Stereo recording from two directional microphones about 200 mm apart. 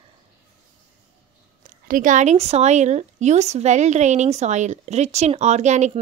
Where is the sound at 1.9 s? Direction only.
40° right (ahead or behind).